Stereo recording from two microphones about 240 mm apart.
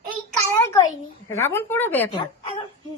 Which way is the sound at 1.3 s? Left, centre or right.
Centre.